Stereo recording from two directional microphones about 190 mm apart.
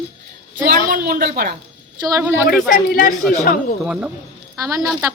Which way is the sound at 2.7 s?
45° left (ahead or behind).